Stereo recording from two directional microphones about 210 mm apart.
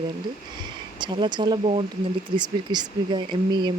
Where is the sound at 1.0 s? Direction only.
20° right (ahead or behind).